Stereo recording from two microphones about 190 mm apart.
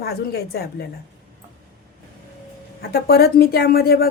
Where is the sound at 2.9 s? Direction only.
55° left (ahead or behind).